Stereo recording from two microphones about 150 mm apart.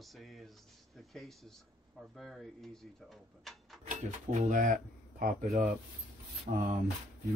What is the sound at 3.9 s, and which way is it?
Speech, 55° right (ahead or behind).